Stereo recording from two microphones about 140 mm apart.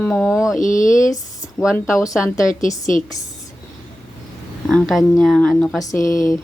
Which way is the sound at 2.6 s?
65° left (ahead or behind).